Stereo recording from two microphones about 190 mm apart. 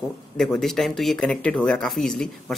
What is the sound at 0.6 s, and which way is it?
Speech, centre (ahead or behind).